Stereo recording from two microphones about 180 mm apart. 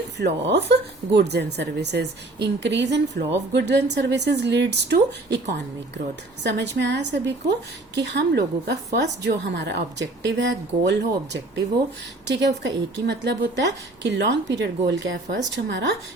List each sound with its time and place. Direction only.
0.2 s speech: 70° right (ahead or behind)